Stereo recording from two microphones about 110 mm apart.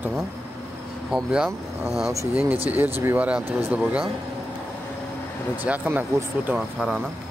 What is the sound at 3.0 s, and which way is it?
Speech, 20° right (ahead or behind).